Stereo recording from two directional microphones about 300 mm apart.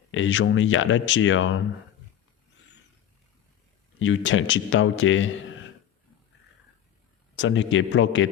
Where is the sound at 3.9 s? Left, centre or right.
Left.